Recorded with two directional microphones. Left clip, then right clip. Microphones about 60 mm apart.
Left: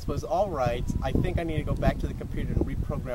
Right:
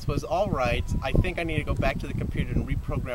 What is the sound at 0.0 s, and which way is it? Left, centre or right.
Speech, centre.